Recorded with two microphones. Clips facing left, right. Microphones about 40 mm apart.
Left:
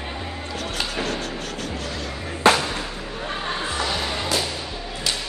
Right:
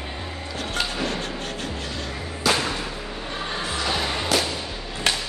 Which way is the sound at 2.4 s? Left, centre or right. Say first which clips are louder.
Left 5 dB; left.